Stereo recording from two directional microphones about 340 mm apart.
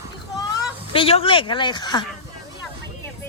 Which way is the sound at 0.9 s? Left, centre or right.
Centre.